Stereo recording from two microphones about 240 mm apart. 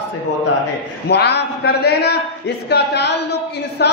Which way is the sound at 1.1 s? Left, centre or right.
Left.